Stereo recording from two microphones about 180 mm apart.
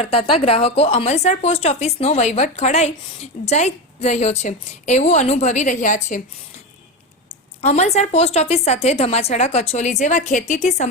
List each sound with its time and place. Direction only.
0.0 s a woman's voice: 30° left (ahead or behind)
7.6 s a woman's voice: 35° left (ahead or behind)